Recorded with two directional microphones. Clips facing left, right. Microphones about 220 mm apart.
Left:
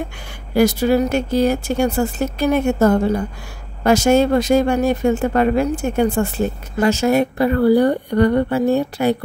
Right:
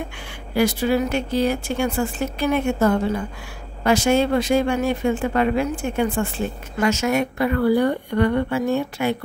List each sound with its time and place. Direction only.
0.6 s speech: 40° left (ahead or behind)